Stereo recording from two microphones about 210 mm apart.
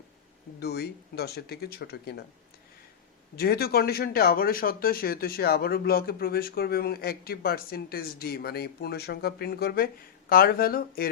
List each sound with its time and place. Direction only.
0.6 s speech: 50° left (ahead or behind)
3.3 s speech: 50° left (ahead or behind)